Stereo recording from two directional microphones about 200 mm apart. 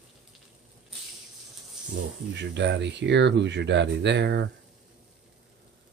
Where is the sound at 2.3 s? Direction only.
60° right (ahead or behind).